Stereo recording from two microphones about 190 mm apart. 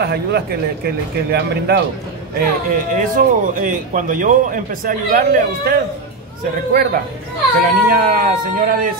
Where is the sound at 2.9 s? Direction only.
45° right (ahead or behind).